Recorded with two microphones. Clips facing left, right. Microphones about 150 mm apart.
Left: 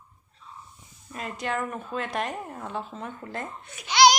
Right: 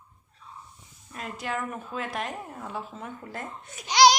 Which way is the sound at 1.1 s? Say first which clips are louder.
Left 2 dB; centre (ahead or behind).